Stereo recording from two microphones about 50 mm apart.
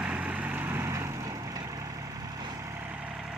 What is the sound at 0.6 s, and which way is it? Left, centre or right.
Vehicle, right.